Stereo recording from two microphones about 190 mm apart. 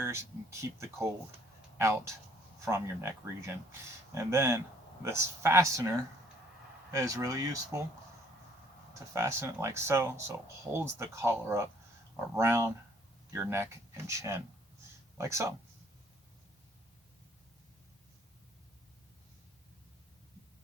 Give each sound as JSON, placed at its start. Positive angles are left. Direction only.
{"t": 0.0, "sound": "speech", "side_deg": -15}
{"t": 8.9, "sound": "speech", "side_deg": -15}